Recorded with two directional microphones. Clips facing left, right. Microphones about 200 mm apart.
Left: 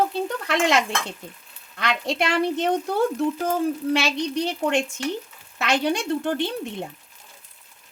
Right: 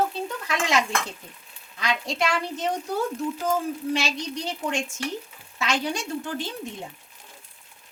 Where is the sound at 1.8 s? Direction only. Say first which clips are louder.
Left 2 dB; 60° left (ahead or behind).